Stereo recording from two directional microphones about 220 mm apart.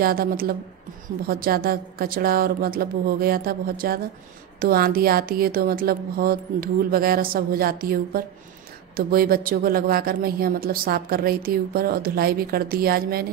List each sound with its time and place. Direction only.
0.0 s a woman's voice: 40° right (ahead or behind)